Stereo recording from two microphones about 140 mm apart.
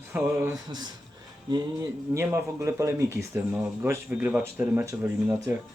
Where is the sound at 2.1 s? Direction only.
20° right (ahead or behind).